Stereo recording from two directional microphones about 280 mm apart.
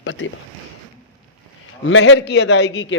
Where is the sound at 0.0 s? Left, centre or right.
Left.